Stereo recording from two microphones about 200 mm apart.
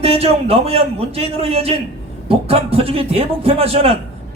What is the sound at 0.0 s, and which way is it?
A man's voice, 30° right (ahead or behind).